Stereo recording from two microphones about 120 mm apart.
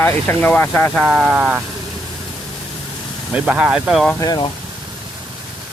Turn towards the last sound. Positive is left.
turn(degrees=35)  # may be behind; listen again after turning